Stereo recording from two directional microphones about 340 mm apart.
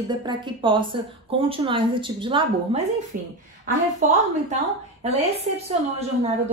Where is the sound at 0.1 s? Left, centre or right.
Centre.